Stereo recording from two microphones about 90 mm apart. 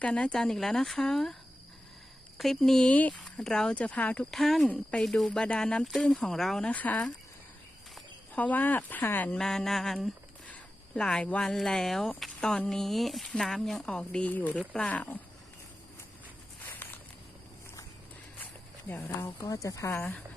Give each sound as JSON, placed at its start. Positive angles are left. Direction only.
{"t": 0.0, "sound": "speech", "side_deg": 10}
{"t": 2.4, "sound": "speech", "side_deg": 5}
{"t": 4.3, "sound": "speech", "side_deg": 0}
{"t": 4.7, "sound": "speech", "side_deg": 15}
{"t": 6.7, "sound": "speech", "side_deg": 15}
{"t": 8.4, "sound": "speech", "side_deg": 20}
{"t": 9.4, "sound": "speech", "side_deg": 5}
{"t": 13.9, "sound": "speech", "side_deg": 15}
{"t": 16.8, "sound": "snake", "side_deg": 20}
{"t": 18.9, "sound": "speech", "side_deg": 20}
{"t": 19.2, "sound": "speech", "side_deg": 35}